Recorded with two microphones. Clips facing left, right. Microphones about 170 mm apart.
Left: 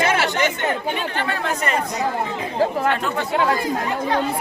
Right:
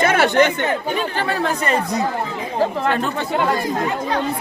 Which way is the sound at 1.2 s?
35° right (ahead or behind).